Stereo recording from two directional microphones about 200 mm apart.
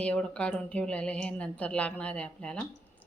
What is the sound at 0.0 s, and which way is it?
A woman's voice, 5° left (ahead or behind).